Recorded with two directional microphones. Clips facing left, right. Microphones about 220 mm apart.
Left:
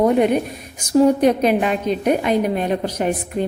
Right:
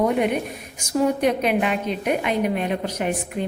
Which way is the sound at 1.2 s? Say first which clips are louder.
Left 5 dB; 40° left (ahead or behind).